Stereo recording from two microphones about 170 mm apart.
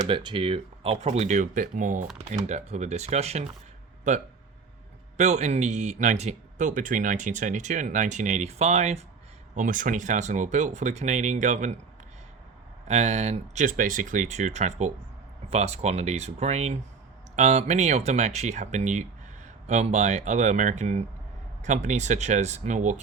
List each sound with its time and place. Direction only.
0.1 s speech: 30° right (ahead or behind)
9.6 s speech: 50° right (ahead or behind)
12.9 s speech: 40° right (ahead or behind)